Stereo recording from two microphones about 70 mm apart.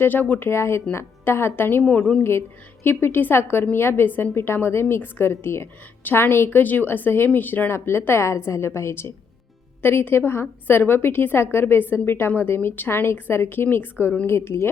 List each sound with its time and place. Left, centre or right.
0.0 s a woman's voice: left
2.8 s a woman's voice: left